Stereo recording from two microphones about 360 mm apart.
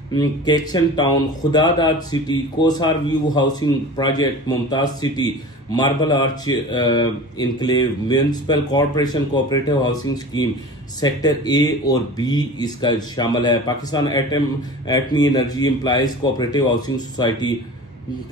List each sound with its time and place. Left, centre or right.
0.1 s speech: centre